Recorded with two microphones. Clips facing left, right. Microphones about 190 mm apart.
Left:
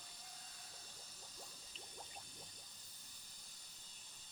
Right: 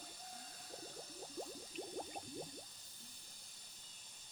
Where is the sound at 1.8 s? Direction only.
55° right (ahead or behind).